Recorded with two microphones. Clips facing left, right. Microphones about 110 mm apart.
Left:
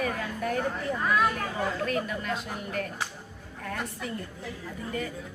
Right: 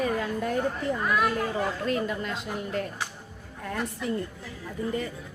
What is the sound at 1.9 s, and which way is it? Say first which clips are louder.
Speech: right 2 dB; 25° right (ahead or behind).